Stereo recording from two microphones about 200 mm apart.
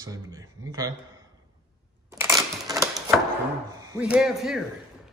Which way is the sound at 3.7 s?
15° right (ahead or behind).